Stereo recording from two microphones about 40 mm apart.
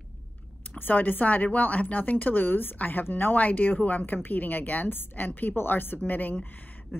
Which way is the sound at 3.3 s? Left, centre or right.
Left.